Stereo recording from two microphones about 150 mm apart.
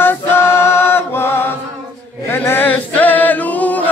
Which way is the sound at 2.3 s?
15° left (ahead or behind).